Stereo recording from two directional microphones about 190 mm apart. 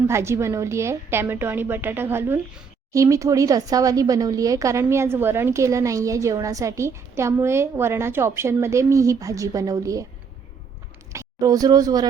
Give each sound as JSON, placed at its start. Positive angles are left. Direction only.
{"t": 0.1, "sound": "speech", "side_deg": -15}
{"t": 11.1, "sound": "speech", "side_deg": -15}